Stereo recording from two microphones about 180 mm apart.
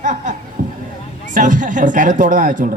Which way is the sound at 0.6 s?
50° right (ahead or behind).